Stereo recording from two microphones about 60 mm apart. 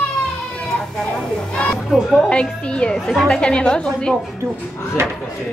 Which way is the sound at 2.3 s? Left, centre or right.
Centre.